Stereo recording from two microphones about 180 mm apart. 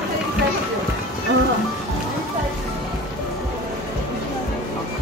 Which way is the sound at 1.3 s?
65° right (ahead or behind).